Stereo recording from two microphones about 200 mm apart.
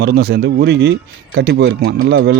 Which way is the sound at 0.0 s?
50° right (ahead or behind).